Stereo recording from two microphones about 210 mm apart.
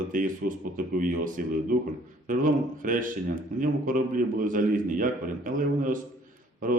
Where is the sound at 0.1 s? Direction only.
40° right (ahead or behind).